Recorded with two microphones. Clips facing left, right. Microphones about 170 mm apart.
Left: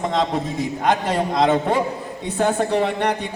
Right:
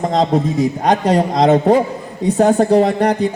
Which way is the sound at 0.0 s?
40° right (ahead or behind).